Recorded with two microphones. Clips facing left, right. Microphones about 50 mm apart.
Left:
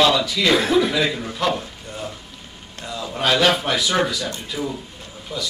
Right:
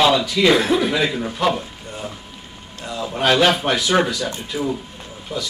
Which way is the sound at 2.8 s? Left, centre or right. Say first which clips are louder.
Right 3 dB; centre.